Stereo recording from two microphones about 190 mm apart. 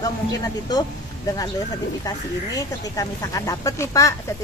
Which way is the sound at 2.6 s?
15° left (ahead or behind).